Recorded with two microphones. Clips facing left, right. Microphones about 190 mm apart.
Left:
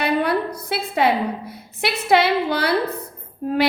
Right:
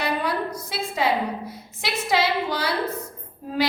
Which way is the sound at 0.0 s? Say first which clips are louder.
Left 5 dB; 60° left (ahead or behind).